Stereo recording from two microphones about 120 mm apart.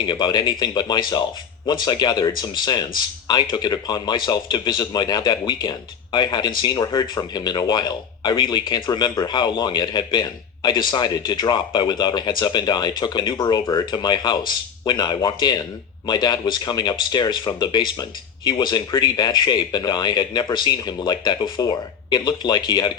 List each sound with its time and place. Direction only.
0.0 s speech: 40° left (ahead or behind)